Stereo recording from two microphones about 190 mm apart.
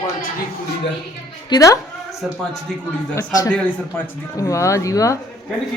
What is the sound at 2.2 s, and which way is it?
Speech, centre (ahead or behind).